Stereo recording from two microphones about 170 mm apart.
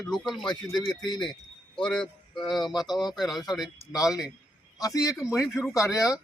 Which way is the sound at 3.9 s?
20° left (ahead or behind).